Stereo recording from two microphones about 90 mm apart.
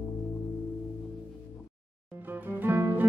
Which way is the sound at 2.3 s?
20° right (ahead or behind).